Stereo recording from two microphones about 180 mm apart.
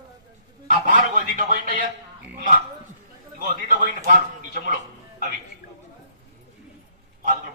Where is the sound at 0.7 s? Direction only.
45° right (ahead or behind).